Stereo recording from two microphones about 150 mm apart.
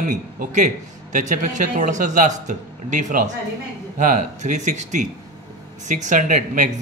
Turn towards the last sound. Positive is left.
turn(degrees=-55)  # may be behind; listen again after turning